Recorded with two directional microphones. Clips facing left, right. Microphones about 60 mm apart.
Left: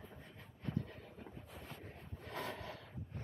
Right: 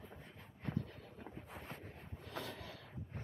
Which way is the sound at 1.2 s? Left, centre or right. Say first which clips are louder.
Right 5 dB; right.